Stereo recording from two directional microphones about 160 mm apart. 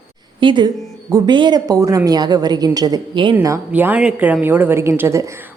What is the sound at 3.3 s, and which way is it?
A woman's voice, 15° right (ahead or behind).